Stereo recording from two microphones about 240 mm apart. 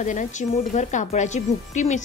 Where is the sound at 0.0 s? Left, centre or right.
Left.